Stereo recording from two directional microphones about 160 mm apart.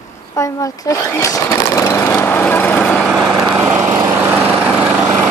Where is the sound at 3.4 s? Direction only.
20° right (ahead or behind).